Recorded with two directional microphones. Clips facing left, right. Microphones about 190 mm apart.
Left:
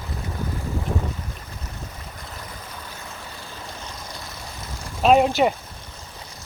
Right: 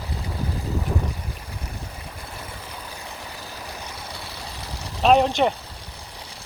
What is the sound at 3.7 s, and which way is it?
Vehicle, 10° right (ahead or behind).